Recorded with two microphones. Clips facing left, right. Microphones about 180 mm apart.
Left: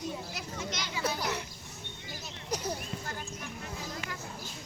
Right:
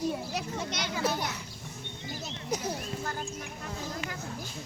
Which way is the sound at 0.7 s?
55° right (ahead or behind).